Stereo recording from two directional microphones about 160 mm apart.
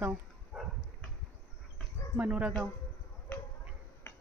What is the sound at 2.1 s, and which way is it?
Speech, 10° right (ahead or behind).